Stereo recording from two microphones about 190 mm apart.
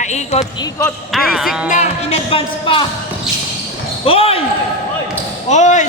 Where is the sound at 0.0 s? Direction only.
35° left (ahead or behind).